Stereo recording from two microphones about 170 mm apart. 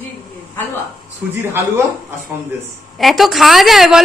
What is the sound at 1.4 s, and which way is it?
Speech, 15° right (ahead or behind).